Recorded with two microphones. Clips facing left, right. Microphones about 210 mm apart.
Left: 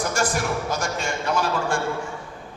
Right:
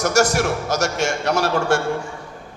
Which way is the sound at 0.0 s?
75° right (ahead or behind).